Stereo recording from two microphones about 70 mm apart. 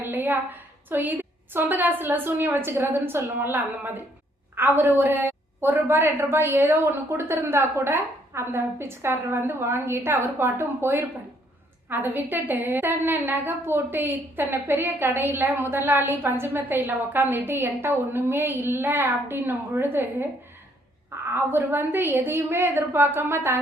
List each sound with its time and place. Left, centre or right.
0.0 s a sound: right
0.9 s a woman's voice: right
21.2 s a woman's voice: right